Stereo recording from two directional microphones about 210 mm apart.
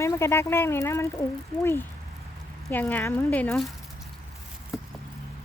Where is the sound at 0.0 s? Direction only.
15° left (ahead or behind).